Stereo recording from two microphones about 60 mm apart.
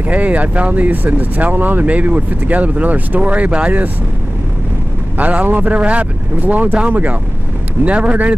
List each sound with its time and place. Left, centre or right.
0.1 s speech: right
5.1 s speech: right